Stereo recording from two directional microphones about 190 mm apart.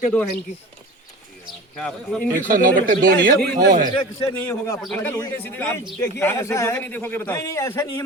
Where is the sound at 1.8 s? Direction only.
5° left (ahead or behind).